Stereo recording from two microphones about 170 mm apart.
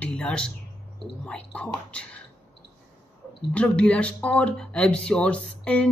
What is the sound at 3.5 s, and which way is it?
Speech, 5° left (ahead or behind).